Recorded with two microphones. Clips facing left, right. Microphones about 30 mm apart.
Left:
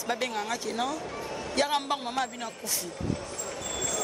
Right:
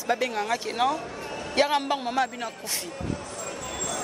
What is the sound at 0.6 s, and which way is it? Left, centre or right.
Speech, right.